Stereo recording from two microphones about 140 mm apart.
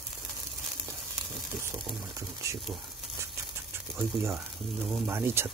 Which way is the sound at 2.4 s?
20° right (ahead or behind).